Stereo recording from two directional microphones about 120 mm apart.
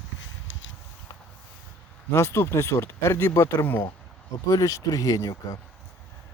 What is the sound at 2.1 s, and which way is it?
Speech, 20° left (ahead or behind).